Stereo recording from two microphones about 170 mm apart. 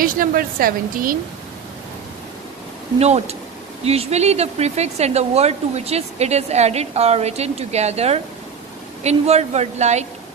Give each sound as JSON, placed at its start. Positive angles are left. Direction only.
{"t": 0.0, "sound": "a woman's voice", "side_deg": -55}
{"t": 3.0, "sound": "speech", "side_deg": -40}